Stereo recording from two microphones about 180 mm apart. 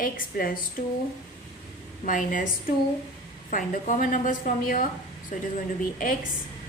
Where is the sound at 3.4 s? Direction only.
45° left (ahead or behind).